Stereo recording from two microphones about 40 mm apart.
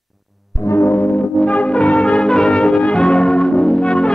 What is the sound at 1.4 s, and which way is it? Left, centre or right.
Brass instrument, left.